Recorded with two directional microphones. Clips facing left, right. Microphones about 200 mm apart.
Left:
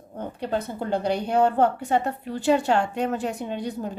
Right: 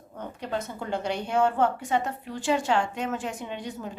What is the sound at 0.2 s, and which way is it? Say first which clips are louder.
A woman's voice: left 4 dB; 35° left (ahead or behind).